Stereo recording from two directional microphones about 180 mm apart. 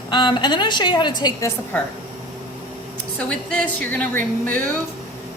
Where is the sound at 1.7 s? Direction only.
10° left (ahead or behind).